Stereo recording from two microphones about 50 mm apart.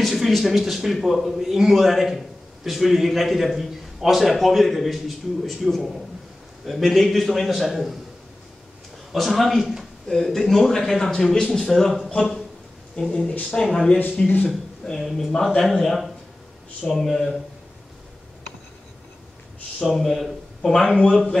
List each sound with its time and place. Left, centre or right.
0.0 s a man's voice: centre
9.1 s a man's voice: centre
13.0 s a man's voice: left
14.1 s a man's voice: left
14.9 s a woman's voice: centre
19.8 s a man's voice: centre
20.6 s a woman's voice: centre